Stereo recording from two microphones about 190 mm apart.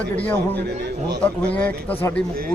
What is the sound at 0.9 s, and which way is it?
Speech, 60° right (ahead or behind).